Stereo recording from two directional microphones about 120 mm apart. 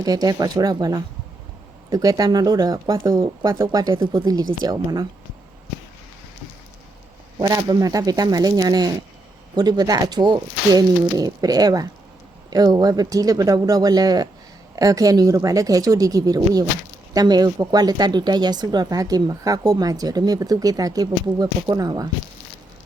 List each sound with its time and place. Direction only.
0.0 s speech: 30° right (ahead or behind)
7.3 s speech: 30° right (ahead or behind)